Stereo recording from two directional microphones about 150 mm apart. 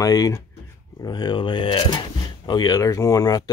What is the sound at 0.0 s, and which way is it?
Speech, 25° left (ahead or behind).